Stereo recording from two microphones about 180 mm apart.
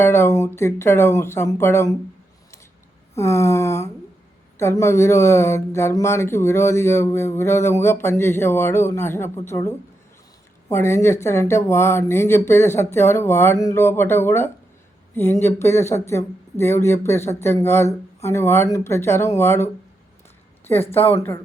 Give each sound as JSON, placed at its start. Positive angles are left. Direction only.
{"t": 0.0, "sound": "speech", "side_deg": 15}
{"t": 3.2, "sound": "speech", "side_deg": 15}